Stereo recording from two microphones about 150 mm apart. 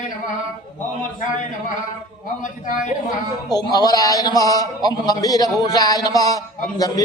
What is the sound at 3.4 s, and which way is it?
A man's voice, 25° left (ahead or behind).